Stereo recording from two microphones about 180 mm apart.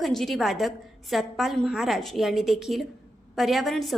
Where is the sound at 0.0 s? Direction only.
Centre (ahead or behind).